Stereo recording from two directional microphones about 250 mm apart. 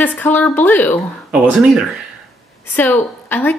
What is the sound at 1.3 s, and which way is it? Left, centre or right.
Speech, centre.